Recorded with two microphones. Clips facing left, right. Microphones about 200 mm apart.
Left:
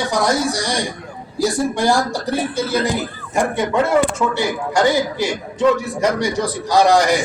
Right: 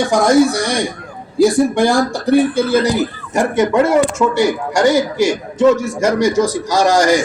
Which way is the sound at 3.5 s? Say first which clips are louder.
Right 5 dB; 45° right (ahead or behind).